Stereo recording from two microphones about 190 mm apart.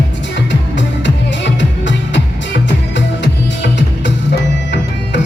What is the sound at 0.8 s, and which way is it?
Music, 70° left (ahead or behind).